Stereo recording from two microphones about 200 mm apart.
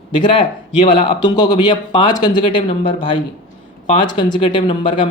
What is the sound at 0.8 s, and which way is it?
Speech, 25° left (ahead or behind).